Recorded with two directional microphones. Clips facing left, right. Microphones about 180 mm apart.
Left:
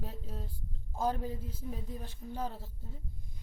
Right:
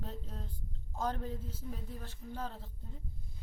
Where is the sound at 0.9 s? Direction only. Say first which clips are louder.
Left 3 dB; 10° left (ahead or behind).